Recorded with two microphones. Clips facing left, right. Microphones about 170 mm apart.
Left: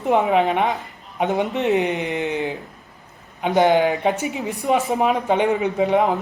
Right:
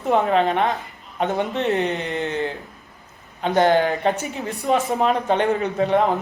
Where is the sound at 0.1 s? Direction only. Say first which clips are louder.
Left 1 dB; 15° left (ahead or behind).